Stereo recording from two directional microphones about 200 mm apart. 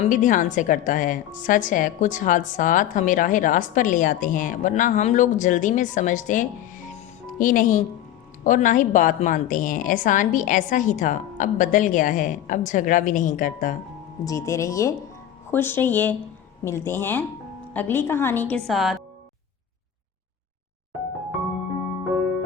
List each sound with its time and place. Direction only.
0.0 s a woman's voice: 40° left (ahead or behind)
14.3 s a woman's voice: 15° left (ahead or behind)